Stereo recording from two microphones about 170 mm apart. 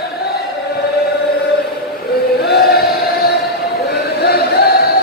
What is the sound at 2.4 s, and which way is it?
Chant, 70° left (ahead or behind).